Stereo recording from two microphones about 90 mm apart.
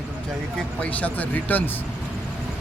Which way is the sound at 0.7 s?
15° left (ahead or behind).